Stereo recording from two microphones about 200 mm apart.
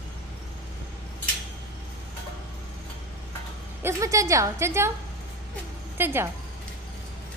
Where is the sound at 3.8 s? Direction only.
15° right (ahead or behind).